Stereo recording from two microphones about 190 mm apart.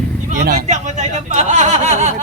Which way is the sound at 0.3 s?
40° right (ahead or behind).